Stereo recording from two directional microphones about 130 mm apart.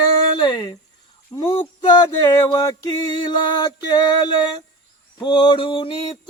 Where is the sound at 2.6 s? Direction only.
30° left (ahead or behind).